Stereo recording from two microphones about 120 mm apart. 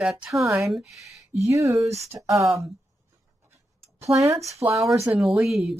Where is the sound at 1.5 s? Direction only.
25° right (ahead or behind).